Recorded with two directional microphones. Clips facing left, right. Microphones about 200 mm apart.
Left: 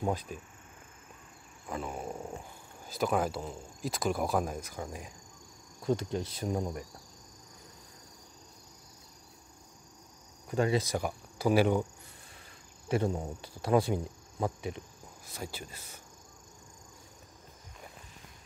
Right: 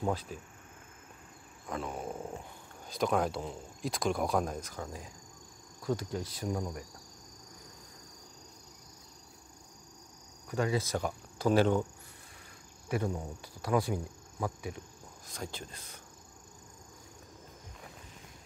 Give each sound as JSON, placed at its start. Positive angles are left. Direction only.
{"t": 0.0, "sound": "speech", "side_deg": 15}
{"t": 1.7, "sound": "wild animals", "side_deg": 5}
{"t": 2.9, "sound": "speech", "side_deg": 5}
{"t": 5.8, "sound": "cricket", "side_deg": 25}
{"t": 10.5, "sound": "speech", "side_deg": 20}
{"t": 12.8, "sound": "speech", "side_deg": 30}
{"t": 15.2, "sound": "speech", "side_deg": 5}